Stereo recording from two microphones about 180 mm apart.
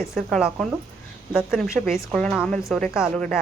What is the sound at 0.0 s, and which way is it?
A woman's voice, centre (ahead or behind).